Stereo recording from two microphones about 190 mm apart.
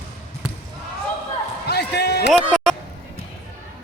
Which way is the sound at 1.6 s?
60° left (ahead or behind).